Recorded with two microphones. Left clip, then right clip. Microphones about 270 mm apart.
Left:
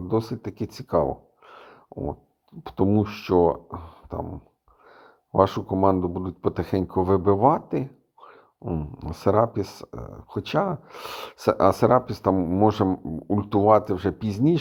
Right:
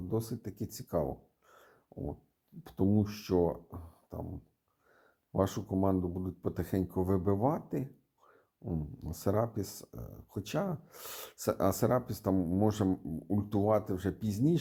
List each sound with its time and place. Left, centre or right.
0.1 s speech: centre